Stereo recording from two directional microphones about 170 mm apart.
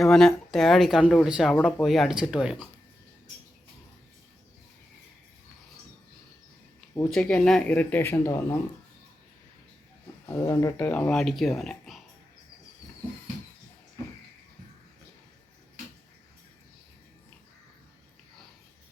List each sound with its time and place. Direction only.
0.0 s speech: centre (ahead or behind)
6.9 s speech: 5° left (ahead or behind)
10.4 s speech: 20° left (ahead or behind)
10.8 s speech: 5° left (ahead or behind)